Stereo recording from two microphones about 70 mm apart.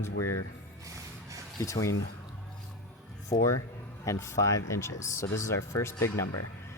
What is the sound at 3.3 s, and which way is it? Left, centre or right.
Speech, left.